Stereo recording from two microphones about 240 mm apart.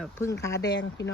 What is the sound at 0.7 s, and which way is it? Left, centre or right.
Speech, left.